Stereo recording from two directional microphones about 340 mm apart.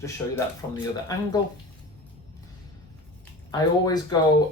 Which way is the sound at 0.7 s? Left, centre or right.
Centre.